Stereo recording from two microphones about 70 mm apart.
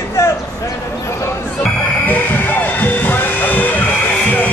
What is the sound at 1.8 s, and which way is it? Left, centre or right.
Music, left.